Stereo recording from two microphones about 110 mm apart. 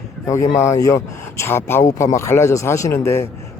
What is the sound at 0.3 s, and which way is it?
A woman's voice, 25° left (ahead or behind).